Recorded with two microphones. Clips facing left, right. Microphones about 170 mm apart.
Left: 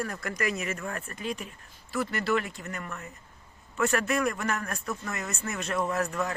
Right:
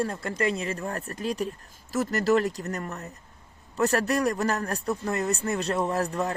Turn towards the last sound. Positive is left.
turn(degrees=-35)  # may be behind; listen again after turning